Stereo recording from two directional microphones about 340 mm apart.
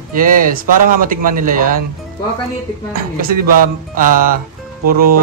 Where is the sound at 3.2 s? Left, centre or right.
Right.